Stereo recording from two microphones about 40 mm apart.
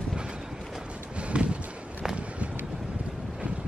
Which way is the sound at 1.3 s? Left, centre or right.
Right.